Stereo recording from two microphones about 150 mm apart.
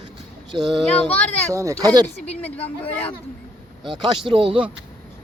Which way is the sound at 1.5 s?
20° right (ahead or behind).